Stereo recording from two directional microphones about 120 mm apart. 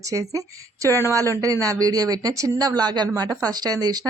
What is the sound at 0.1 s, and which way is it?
Speech, 30° right (ahead or behind).